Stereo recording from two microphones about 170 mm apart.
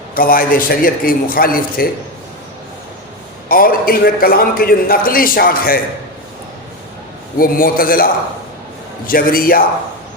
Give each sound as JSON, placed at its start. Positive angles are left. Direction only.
{"t": 0.1, "sound": "a man's voice", "side_deg": 60}
{"t": 3.5, "sound": "a man's voice", "side_deg": 60}
{"t": 7.3, "sound": "a man's voice", "side_deg": 55}